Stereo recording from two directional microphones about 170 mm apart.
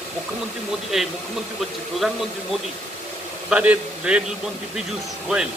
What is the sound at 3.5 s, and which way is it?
Speech, 10° right (ahead or behind).